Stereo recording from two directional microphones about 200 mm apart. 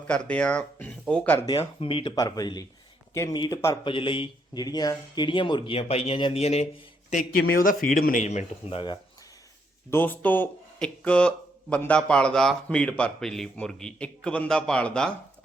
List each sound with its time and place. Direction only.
0.1 s speech: 5° left (ahead or behind)
1.5 s speech: 25° left (ahead or behind)
7.3 s speech: 50° left (ahead or behind); by 9.0 s 25° left (ahead or behind)
9.9 s speech: 10° left (ahead or behind)